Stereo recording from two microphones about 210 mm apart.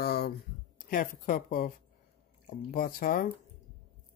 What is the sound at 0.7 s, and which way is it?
Speech, 40° left (ahead or behind).